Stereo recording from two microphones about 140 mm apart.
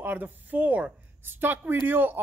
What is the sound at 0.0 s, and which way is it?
Speech, 10° right (ahead or behind).